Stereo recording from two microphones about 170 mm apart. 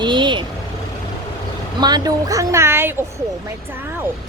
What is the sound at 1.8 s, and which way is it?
Speech, 20° right (ahead or behind).